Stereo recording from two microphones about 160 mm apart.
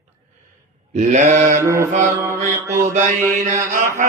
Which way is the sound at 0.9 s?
50° right (ahead or behind).